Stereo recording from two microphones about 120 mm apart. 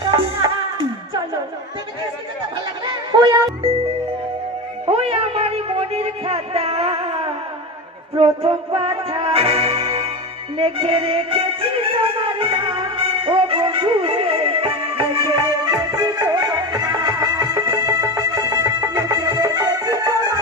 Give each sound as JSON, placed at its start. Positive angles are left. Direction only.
{"t": 0.1, "sound": "music", "side_deg": -40}
{"t": 3.1, "sound": "music", "side_deg": -40}
{"t": 4.8, "sound": "a sound", "side_deg": -55}
{"t": 8.2, "sound": "music", "side_deg": -50}
{"t": 15.6, "sound": "music", "side_deg": -35}